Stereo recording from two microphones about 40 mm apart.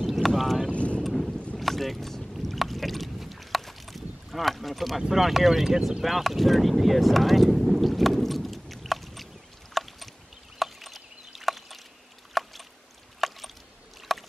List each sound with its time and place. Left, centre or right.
0.0 s boat: centre
0.7 s boat: left
1.0 s boat: centre
1.6 s rowboat: centre
2.4 s boat: centre
5.1 s speech: centre
6.0 s boat: centre
9.8 s rowboat: centre
10.6 s a sound: centre
14.1 s rowboat: centre